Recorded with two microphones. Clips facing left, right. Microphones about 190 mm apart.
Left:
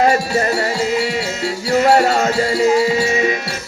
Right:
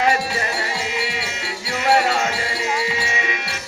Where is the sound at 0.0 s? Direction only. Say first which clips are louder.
Left 6 dB; 40° left (ahead or behind).